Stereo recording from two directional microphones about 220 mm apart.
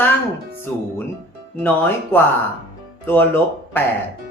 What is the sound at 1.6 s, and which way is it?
Speech, 10° left (ahead or behind).